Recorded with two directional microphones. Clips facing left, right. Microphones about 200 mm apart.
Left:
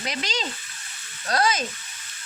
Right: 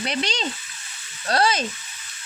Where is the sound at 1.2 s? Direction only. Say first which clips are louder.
Right 2 dB; 30° right (ahead or behind).